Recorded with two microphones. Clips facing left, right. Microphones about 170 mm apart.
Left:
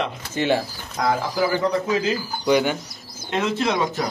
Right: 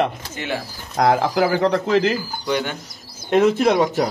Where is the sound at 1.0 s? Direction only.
70° right (ahead or behind).